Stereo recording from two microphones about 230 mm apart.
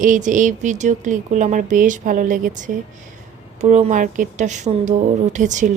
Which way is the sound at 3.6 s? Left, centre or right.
Right.